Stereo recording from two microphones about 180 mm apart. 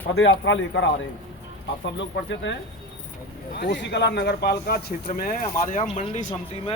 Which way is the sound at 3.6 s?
75° left (ahead or behind).